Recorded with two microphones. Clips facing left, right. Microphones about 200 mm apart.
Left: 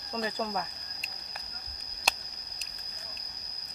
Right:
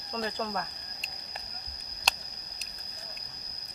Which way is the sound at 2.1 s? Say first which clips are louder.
Left 1 dB; 5° left (ahead or behind).